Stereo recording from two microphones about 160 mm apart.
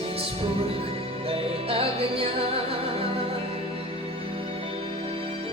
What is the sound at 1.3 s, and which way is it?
Music, 35° right (ahead or behind).